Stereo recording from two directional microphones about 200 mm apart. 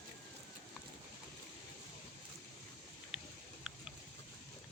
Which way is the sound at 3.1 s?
5° right (ahead or behind).